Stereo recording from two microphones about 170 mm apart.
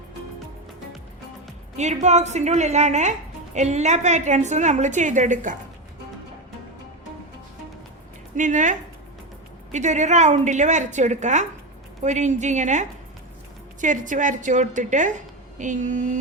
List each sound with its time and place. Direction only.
1.7 s a woman's voice: 40° right (ahead or behind)
8.4 s a woman's voice: 50° right (ahead or behind)
9.7 s a woman's voice: 45° right (ahead or behind)